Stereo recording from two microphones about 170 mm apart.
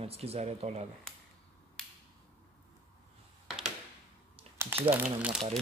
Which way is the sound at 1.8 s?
5° left (ahead or behind).